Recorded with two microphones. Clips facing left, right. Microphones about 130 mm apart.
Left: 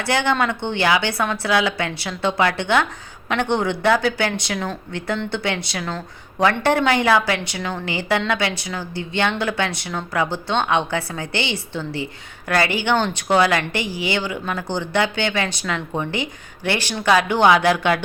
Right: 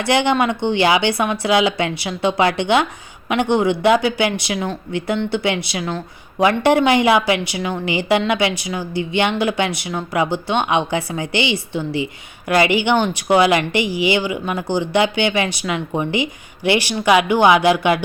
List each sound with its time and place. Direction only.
0.0 s speech: 20° right (ahead or behind)